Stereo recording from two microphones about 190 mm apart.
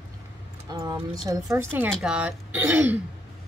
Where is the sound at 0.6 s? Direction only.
20° right (ahead or behind).